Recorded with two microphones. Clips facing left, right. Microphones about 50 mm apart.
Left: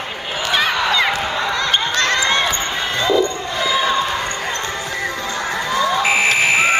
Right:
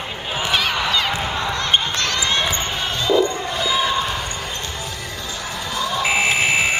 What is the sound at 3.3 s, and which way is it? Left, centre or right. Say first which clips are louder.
Basketball bounce: even; right.